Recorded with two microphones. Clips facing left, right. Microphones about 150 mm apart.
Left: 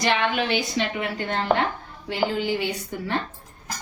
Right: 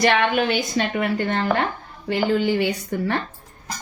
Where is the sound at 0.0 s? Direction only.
55° right (ahead or behind).